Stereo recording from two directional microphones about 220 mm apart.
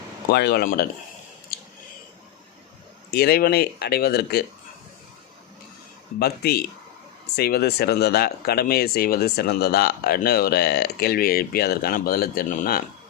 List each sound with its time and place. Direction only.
0.3 s speech: 50° left (ahead or behind)
1.5 s a sound: 45° left (ahead or behind)
3.1 s speech: 45° left (ahead or behind)
6.1 s speech: 45° left (ahead or behind)